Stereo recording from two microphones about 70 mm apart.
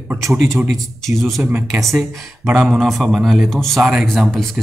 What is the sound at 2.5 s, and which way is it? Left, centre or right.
Speech, centre.